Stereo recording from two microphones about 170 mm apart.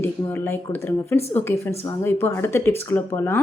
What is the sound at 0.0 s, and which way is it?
A woman's voice, 15° left (ahead or behind).